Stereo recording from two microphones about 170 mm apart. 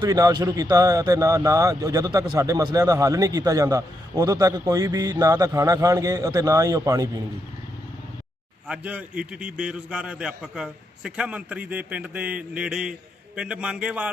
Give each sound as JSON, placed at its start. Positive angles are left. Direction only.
{"t": 0.0, "sound": "a man's voice", "side_deg": -20}
{"t": 8.6, "sound": "a man's voice", "side_deg": -5}